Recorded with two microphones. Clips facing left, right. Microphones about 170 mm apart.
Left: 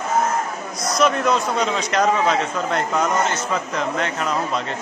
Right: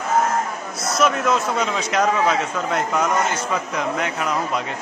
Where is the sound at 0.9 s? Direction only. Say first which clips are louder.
Left 1 dB; 5° right (ahead or behind).